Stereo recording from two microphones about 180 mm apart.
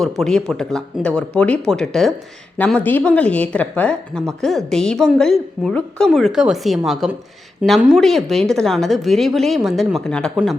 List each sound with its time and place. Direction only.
0.2 s speech: 5° left (ahead or behind)